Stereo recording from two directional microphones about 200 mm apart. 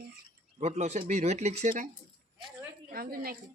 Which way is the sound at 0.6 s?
35° right (ahead or behind).